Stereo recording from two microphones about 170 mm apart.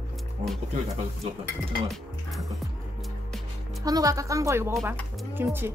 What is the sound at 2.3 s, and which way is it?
Music, centre (ahead or behind).